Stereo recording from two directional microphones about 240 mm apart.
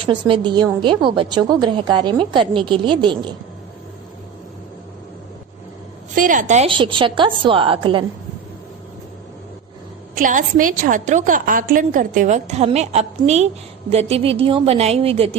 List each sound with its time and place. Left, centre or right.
0.0 s a woman's voice: centre
6.1 s a woman's voice: right
10.2 s a woman's voice: right